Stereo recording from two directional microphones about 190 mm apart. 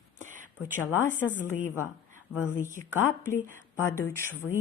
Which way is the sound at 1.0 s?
10° left (ahead or behind).